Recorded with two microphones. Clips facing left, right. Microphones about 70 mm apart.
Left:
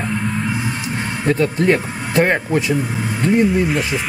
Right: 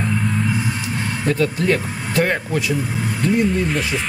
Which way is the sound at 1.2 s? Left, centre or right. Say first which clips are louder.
Left 3 dB; left.